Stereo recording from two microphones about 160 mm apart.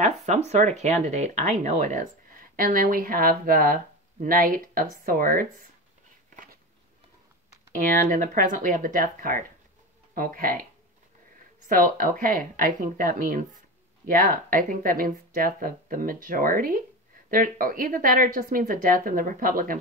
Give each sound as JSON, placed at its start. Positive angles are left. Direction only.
{"t": 0.0, "sound": "speech", "side_deg": -45}
{"t": 6.3, "sound": "a sound", "side_deg": -60}
{"t": 7.7, "sound": "speech", "side_deg": -55}